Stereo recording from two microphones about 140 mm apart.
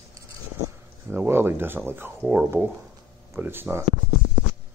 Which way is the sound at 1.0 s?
15° right (ahead or behind).